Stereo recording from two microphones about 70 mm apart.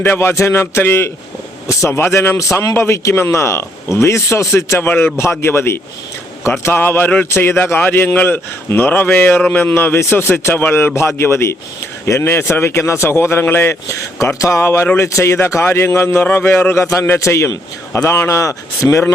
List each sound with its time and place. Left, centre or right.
0.0 s a man's voice: left
4.9 s speech: left
13.8 s a man's voice: left